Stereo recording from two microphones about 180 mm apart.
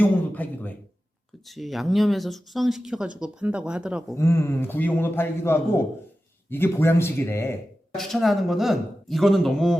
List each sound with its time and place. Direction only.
0.0 s a man's voice: 10° left (ahead or behind); by 4.0 s 5° right (ahead or behind)
4.1 s a man's voice: 15° left (ahead or behind)
7.9 s speech: centre (ahead or behind)